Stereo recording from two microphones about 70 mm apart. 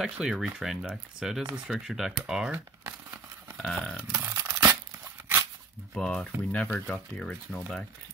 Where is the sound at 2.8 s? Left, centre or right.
Right.